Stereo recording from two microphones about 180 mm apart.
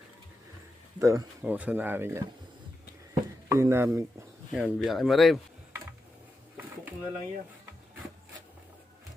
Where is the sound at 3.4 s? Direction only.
15° right (ahead or behind).